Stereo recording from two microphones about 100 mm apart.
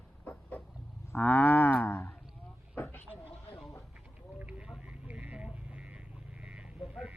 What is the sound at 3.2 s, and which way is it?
Vehicle, 70° left (ahead or behind).